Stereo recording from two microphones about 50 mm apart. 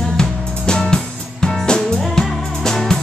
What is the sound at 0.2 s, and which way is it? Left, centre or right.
Music, centre.